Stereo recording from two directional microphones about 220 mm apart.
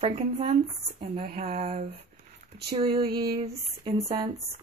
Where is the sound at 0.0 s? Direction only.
30° right (ahead or behind).